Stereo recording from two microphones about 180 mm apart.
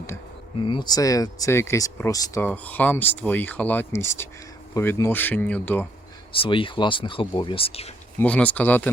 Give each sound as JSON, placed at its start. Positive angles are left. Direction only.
{"t": 0.6, "sound": "speech", "side_deg": 25}
{"t": 6.3, "sound": "speech", "side_deg": 30}
{"t": 8.2, "sound": "speech", "side_deg": 10}